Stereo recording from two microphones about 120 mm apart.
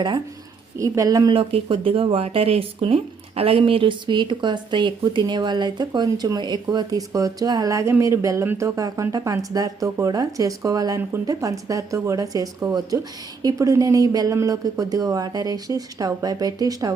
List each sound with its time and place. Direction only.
0.8 s speech: 30° right (ahead or behind)
1.3 s speech: 50° right (ahead or behind); by 16.9 s 30° right (ahead or behind)